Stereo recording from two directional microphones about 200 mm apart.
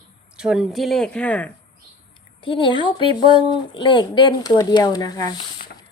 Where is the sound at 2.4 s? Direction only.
25° left (ahead or behind).